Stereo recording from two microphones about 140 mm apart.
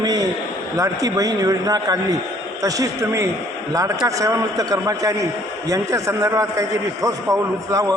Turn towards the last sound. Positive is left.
turn(degrees=-25)  # may be behind; listen again after turning